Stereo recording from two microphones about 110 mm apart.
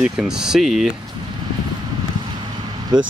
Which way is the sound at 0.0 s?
5° right (ahead or behind).